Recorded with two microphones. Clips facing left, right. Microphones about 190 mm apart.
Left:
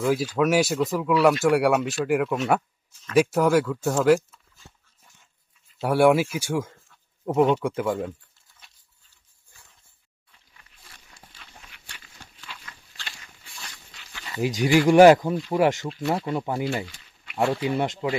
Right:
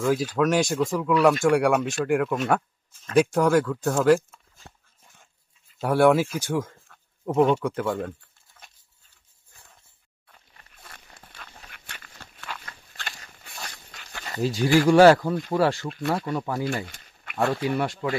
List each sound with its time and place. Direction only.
0.3 s speech: 5° left (ahead or behind)
5.8 s speech: 10° left (ahead or behind)
8.6 s dog: 55° right (ahead or behind)
10.5 s a sound: 50° right (ahead or behind)
14.4 s speech: 15° left (ahead or behind)
16.8 s a sound: 55° right (ahead or behind)
17.3 s speech: 20° left (ahead or behind)